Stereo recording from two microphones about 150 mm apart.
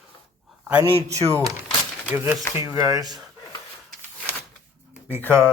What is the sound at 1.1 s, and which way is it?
Speech, 20° right (ahead or behind).